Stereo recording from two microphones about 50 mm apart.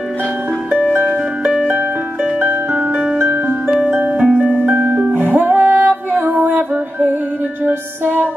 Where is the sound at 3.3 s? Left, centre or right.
Right.